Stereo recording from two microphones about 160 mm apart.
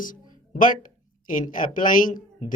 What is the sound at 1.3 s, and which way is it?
A man's voice, 60° left (ahead or behind).